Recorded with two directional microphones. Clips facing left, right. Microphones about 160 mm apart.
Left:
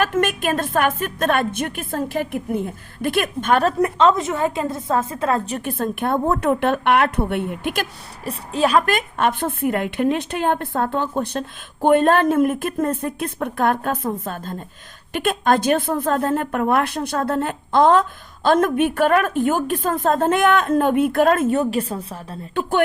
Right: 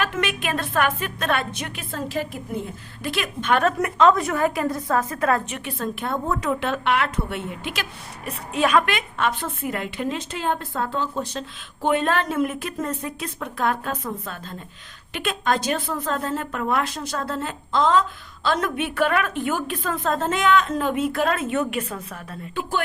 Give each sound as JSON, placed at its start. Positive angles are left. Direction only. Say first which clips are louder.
{"t": 0.0, "sound": "a woman's voice", "louder": "left 6 dB", "side_deg": 45}
{"t": 5.5, "sound": "a woman's voice", "louder": "left 5 dB", "side_deg": 45}
{"t": 8.2, "sound": "a woman's voice", "louder": "left 3 dB", "side_deg": 30}
{"t": 9.0, "sound": "a woman's voice", "louder": "left 4 dB", "side_deg": 50}
{"t": 21.5, "sound": "a woman's voice", "louder": "left 4 dB", "side_deg": 30}